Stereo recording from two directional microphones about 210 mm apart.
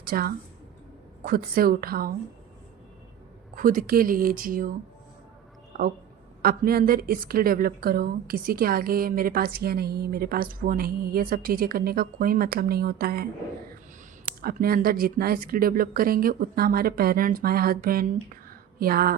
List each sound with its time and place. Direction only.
0.0 s a woman's voice: 45° right (ahead or behind)
3.5 s speech: 40° right (ahead or behind)
6.4 s a woman's voice: 45° right (ahead or behind)
14.4 s a woman's voice: 45° right (ahead or behind)